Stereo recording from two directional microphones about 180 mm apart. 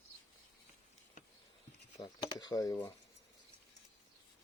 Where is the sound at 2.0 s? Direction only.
25° left (ahead or behind).